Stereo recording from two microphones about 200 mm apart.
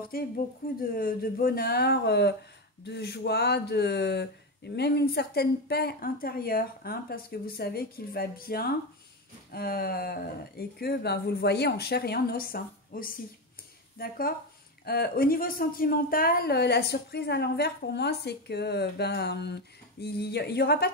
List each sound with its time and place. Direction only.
0.1 s a woman's voice: 50° left (ahead or behind)